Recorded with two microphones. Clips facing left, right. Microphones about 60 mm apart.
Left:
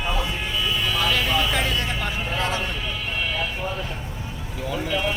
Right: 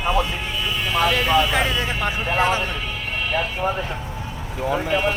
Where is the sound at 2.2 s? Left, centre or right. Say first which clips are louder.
Right 7 dB; right.